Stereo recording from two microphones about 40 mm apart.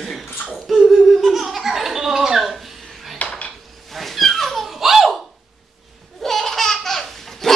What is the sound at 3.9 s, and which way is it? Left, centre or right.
Cat, centre.